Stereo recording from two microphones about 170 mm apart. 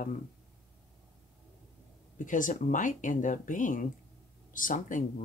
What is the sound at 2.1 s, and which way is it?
Speech, 50° left (ahead or behind).